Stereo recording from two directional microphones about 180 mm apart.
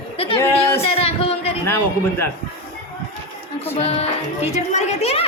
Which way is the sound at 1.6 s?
15° left (ahead or behind).